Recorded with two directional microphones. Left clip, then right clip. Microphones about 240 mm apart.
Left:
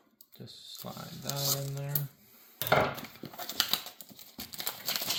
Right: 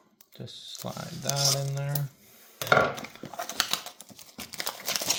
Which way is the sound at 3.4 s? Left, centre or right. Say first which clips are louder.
Right 2 dB; centre.